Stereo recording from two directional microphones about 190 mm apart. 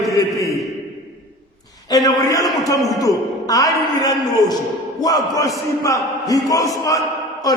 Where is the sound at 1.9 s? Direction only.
20° left (ahead or behind).